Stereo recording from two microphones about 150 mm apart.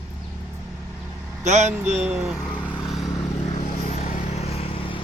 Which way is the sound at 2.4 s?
10° left (ahead or behind).